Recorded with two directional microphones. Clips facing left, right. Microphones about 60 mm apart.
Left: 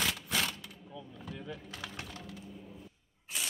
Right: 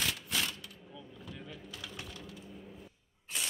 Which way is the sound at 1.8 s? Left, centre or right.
Left.